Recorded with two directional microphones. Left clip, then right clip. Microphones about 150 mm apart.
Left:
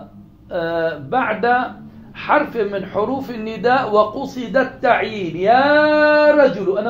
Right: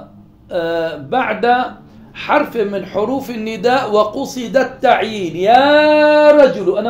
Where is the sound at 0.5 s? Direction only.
30° right (ahead or behind).